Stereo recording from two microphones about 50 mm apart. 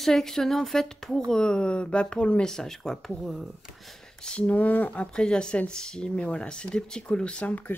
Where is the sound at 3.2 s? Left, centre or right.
Centre.